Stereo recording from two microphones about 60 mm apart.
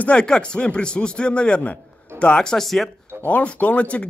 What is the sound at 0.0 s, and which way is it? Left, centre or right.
A man's voice, centre.